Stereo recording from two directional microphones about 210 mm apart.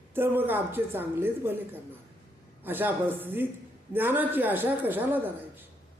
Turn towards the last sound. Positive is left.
turn(degrees=-10)  # may be behind; listen again after turning